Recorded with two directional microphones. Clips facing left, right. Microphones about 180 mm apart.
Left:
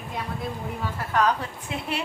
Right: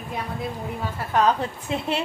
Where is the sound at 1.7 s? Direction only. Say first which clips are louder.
Right 5 dB; 25° right (ahead or behind).